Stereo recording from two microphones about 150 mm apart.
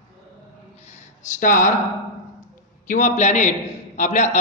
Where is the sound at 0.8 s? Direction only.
50° left (ahead or behind).